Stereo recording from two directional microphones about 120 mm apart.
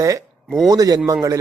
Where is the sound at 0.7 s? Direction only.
30° right (ahead or behind).